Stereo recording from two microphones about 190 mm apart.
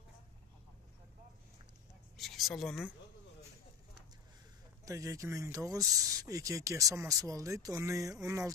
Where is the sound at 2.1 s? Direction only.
Centre (ahead or behind).